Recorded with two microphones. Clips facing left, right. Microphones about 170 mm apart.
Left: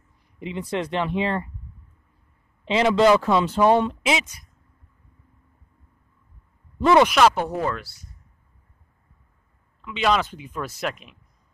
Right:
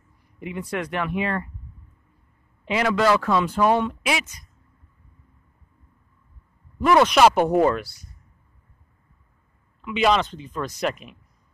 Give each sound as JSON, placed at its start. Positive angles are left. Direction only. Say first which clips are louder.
{"t": 0.4, "sound": "speech", "louder": "left 2 dB", "side_deg": 20}
{"t": 2.6, "sound": "speech", "louder": "left 3 dB", "side_deg": 25}
{"t": 7.2, "sound": "speech", "louder": "right 3 dB", "side_deg": -15}
{"t": 9.8, "sound": "speech", "louder": "right 2 dB", "side_deg": -10}
{"t": 10.1, "sound": "speech", "louder": "right 1 dB", "side_deg": 10}
{"t": 10.8, "sound": "speech", "louder": "right 6 dB", "side_deg": 0}